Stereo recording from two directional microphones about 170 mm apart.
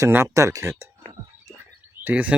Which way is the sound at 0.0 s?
15° right (ahead or behind).